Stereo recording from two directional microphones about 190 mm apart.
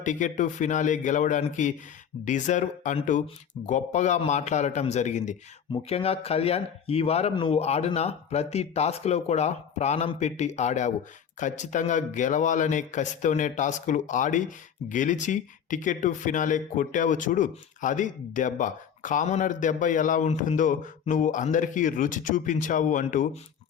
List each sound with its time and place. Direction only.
0.0 s speech: 40° left (ahead or behind)